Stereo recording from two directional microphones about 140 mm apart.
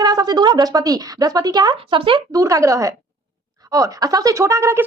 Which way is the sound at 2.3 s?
25° right (ahead or behind).